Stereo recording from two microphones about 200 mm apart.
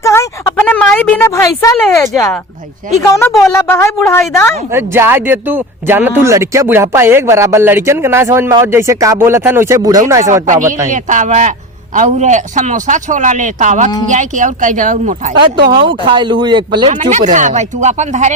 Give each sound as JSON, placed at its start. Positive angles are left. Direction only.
{"t": 0.0, "sound": "a sound", "side_deg": 15}
{"t": 3.0, "sound": "speech", "side_deg": 15}
{"t": 4.7, "sound": "speech", "side_deg": -10}
{"t": 10.8, "sound": "a man's voice", "side_deg": -40}
{"t": 15.7, "sound": "speech", "side_deg": -25}
{"t": 16.9, "sound": "a man's voice", "side_deg": -40}